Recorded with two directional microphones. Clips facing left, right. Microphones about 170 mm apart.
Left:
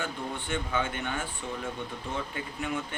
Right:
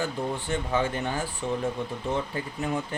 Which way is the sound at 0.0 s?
35° right (ahead or behind).